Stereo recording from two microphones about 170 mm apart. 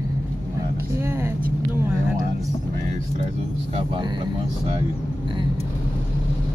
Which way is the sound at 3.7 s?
25° right (ahead or behind).